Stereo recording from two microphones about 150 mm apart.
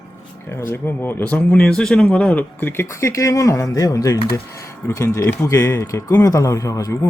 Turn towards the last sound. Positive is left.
turn(degrees=20)  # may be behind; listen again after turning